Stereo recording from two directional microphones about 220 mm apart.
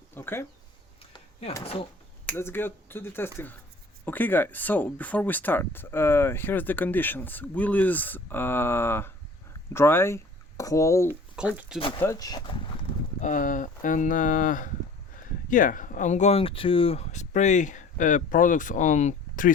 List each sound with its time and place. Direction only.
0.1 s a sound: 10° left (ahead or behind)
1.1 s a sound: 30° left (ahead or behind)
1.6 s speech: 25° left (ahead or behind)
2.2 s speech: 10° left (ahead or behind)
11.1 s speech: 5° right (ahead or behind)
11.8 s speech: 25° left (ahead or behind)
13.2 s speech: 35° left (ahead or behind)